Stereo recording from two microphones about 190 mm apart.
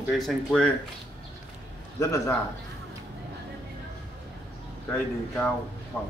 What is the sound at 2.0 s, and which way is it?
Speech, 15° left (ahead or behind).